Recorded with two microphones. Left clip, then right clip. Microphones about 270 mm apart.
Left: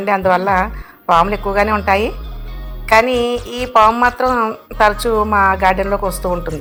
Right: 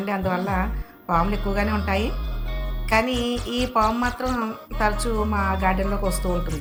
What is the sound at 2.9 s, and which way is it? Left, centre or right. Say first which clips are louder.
Music: left 10 dB; left.